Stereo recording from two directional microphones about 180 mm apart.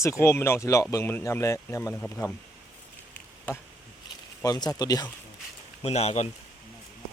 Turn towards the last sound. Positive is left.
turn(degrees=35)  # may be behind; listen again after turning